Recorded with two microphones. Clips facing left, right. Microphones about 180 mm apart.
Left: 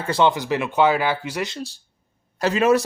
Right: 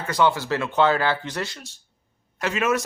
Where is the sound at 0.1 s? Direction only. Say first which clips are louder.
Left 2 dB; 20° left (ahead or behind).